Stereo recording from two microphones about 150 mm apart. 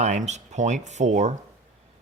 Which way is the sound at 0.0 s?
50° right (ahead or behind).